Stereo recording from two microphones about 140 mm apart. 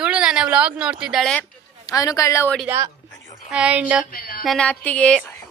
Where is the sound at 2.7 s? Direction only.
20° right (ahead or behind).